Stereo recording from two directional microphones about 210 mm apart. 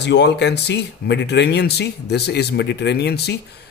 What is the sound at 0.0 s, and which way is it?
Speech, 55° left (ahead or behind).